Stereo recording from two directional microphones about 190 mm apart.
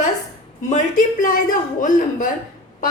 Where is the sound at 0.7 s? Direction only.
40° left (ahead or behind).